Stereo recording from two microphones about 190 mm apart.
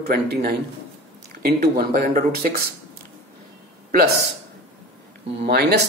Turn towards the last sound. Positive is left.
turn(degrees=-60)  # may be behind; listen again after turning